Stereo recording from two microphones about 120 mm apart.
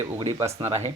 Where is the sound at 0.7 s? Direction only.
65° right (ahead or behind).